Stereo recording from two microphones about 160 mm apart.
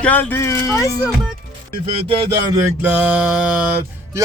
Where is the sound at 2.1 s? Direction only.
35° right (ahead or behind).